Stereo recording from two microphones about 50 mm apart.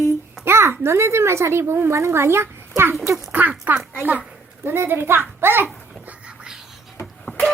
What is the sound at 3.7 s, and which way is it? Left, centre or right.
Speech, right.